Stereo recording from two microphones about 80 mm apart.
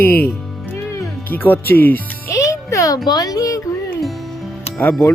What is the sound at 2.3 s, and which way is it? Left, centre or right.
Music, left.